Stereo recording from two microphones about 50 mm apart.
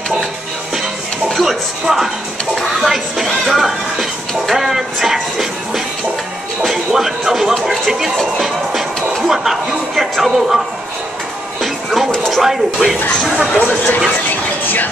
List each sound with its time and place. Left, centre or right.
1.3 s music: centre
3.3 s speech: centre
4.3 s music: centre
6.6 s music: centre
9.3 s speech: centre
11.6 s music: centre
12.3 s speech: centre
13.6 s speech: left